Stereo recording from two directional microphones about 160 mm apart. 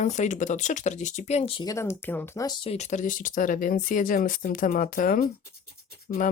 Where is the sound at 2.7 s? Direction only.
45° left (ahead or behind).